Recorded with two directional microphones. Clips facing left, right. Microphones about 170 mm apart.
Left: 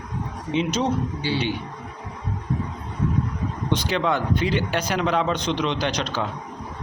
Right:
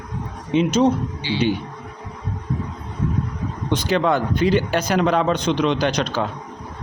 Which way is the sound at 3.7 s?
45° right (ahead or behind).